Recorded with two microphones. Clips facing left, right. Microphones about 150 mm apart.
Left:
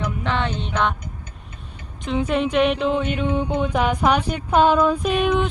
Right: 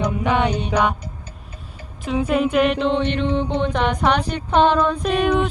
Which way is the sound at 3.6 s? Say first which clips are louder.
Even; 5° left (ahead or behind).